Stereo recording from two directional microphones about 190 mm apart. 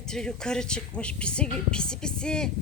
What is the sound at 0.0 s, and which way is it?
Speech, 5° left (ahead or behind).